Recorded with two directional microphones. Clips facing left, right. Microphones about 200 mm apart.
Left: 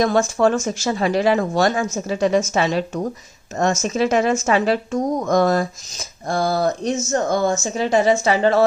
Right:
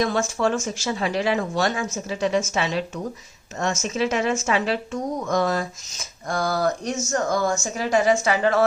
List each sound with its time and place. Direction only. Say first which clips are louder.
0.0 s speech: left 5 dB; 45° left (ahead or behind); by 8.6 s 30° left (ahead or behind)